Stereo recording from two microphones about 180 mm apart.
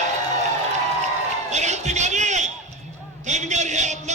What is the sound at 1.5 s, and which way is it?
Music, 40° right (ahead or behind).